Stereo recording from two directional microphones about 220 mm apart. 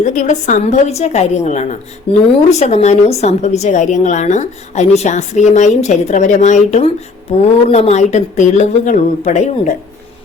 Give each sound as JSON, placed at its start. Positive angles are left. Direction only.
{"t": 0.0, "sound": "speech", "side_deg": 35}